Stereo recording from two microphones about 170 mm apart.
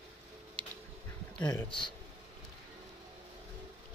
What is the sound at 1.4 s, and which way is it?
Speech, 25° left (ahead or behind).